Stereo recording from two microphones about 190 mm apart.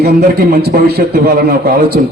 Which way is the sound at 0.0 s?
55° right (ahead or behind).